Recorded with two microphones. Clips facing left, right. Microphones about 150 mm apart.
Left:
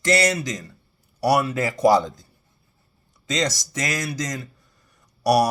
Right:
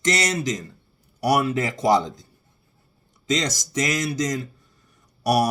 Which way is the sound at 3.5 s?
25° right (ahead or behind).